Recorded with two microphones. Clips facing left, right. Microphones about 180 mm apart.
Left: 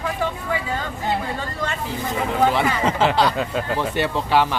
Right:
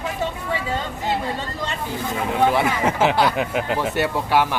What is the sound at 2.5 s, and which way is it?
Speech, 10° right (ahead or behind).